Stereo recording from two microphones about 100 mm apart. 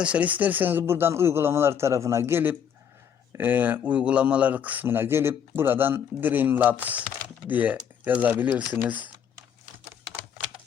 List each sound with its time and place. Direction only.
0.0 s speech: 15° right (ahead or behind)